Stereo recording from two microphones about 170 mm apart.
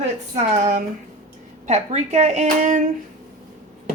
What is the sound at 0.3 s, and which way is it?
Speech, 45° right (ahead or behind).